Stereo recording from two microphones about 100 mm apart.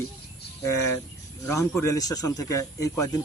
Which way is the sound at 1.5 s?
30° left (ahead or behind).